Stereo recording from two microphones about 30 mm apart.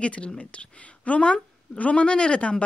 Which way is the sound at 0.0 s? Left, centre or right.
Left.